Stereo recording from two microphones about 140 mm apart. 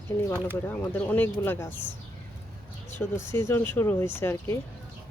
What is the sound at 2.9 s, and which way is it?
Speech, 15° left (ahead or behind).